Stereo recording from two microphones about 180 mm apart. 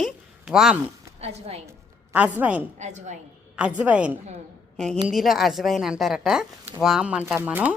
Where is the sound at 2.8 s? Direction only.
40° right (ahead or behind).